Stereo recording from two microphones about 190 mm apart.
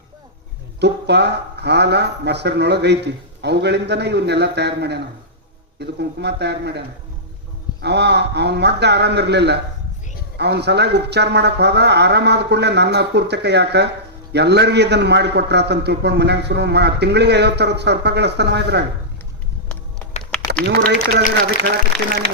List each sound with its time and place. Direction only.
0.8 s a man's voice: 60° right (ahead or behind)
20.7 s a man's voice: 60° right (ahead or behind)